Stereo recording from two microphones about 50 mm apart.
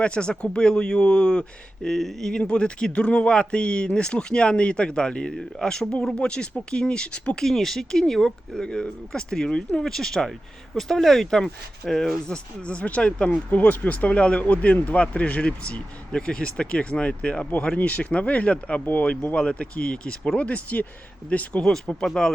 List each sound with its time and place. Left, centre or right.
0.0 s a man's voice: left; by 2.3 s centre
2.4 s speech: left
5.3 s speech: centre
6.1 s speech: centre
7.4 s a man's voice: centre
8.6 s a man's voice: centre
12.6 s a man's voice: left
20.5 s speech: left
21.6 s a man's voice: centre